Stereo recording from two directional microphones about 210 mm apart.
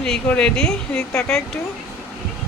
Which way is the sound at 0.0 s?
5° left (ahead or behind).